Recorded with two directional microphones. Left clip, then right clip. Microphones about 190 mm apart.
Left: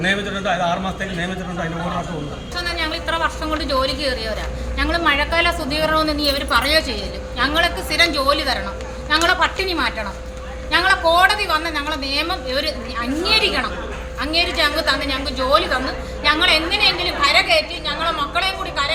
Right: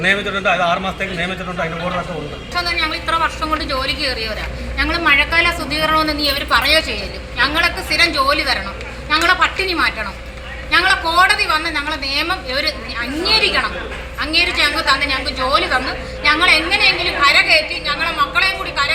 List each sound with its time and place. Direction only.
0.0 s a woman's voice: 5° left (ahead or behind)
2.6 s a woman's voice: 15° left (ahead or behind)